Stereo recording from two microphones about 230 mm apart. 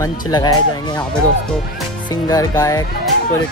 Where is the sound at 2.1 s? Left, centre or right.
Centre.